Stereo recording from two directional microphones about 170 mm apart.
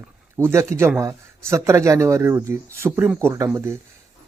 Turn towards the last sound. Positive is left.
turn(degrees=-15)  # may be behind; listen again after turning